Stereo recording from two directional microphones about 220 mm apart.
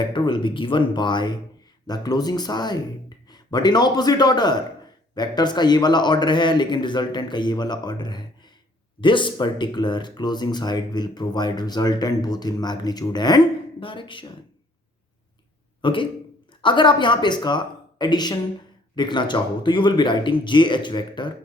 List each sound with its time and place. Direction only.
0.1 s a man's voice: 20° left (ahead or behind)
15.8 s speech: 20° left (ahead or behind)